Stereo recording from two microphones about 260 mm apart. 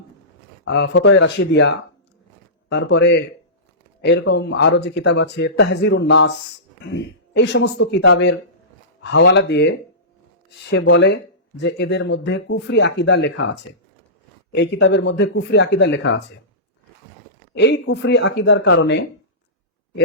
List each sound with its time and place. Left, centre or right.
0.6 s speech: left
17.5 s speech: left